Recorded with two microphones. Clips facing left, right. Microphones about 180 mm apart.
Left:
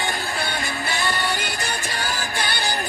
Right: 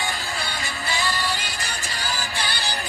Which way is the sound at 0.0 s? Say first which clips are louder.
Left 3 dB; 55° left (ahead or behind).